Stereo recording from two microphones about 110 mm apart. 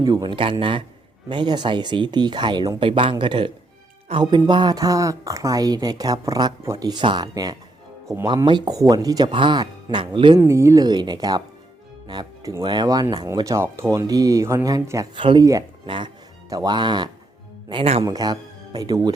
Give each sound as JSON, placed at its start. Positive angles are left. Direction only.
{"t": 0.0, "sound": "a woman's voice", "side_deg": -35}
{"t": 0.3, "sound": "a woman's voice", "side_deg": -50}
{"t": 8.4, "sound": "a woman's voice", "side_deg": -40}
{"t": 9.3, "sound": "speech", "side_deg": -45}
{"t": 10.4, "sound": "a woman's voice", "side_deg": -25}
{"t": 12.6, "sound": "a woman's voice", "side_deg": -40}
{"t": 15.1, "sound": "speech", "side_deg": -50}
{"t": 17.7, "sound": "speech", "side_deg": -60}
{"t": 18.0, "sound": "speech", "side_deg": -35}